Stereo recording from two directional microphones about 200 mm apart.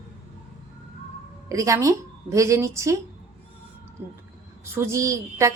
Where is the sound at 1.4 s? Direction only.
15° right (ahead or behind).